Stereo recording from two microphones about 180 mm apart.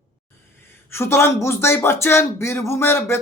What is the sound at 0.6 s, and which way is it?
Speech, 15° left (ahead or behind).